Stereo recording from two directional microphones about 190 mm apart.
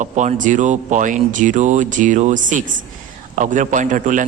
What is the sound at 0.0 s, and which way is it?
A man's voice, 40° right (ahead or behind).